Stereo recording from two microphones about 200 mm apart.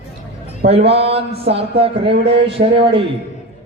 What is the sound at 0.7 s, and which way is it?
Speech, 30° right (ahead or behind).